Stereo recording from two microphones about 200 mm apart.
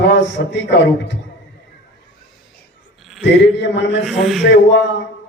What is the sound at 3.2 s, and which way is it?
Speech, 60° left (ahead or behind).